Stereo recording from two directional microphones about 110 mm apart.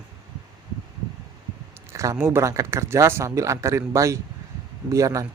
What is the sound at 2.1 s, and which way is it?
A man's voice, 20° right (ahead or behind).